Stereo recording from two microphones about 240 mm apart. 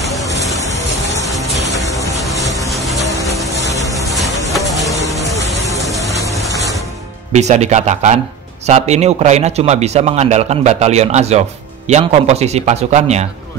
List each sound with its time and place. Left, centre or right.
1.4 s music: centre
2.3 s music: centre
2.7 s music: centre
4.5 s music: centre
7.3 s a man's voice: right